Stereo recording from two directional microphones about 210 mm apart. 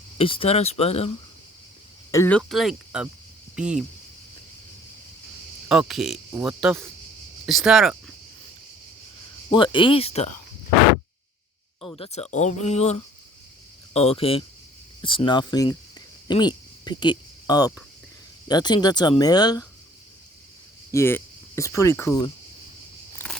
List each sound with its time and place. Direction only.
0.2 s speech: 25° left (ahead or behind)
2.1 s cricket: 10° left (ahead or behind)
3.5 s speech: 5° right (ahead or behind)
5.6 s cricket: centre (ahead or behind)
9.5 s speech: 25° left (ahead or behind)
11.9 s speech: 30° left (ahead or behind)
20.9 s speech: 10° left (ahead or behind)
23.1 s a sound: 5° left (ahead or behind)